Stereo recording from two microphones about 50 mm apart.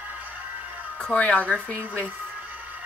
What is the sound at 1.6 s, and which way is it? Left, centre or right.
Speech, left.